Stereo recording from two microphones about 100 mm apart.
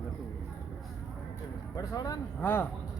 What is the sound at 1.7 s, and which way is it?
Speech, 40° left (ahead or behind).